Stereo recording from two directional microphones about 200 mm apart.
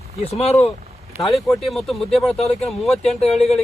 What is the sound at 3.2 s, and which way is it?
Speech, 30° left (ahead or behind).